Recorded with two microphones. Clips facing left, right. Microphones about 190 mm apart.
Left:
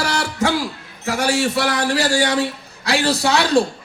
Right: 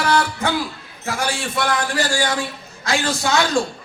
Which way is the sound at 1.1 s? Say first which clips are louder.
Left 5 dB; 75° left (ahead or behind).